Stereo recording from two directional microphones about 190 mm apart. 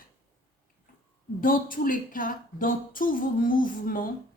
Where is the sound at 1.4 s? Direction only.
45° left (ahead or behind).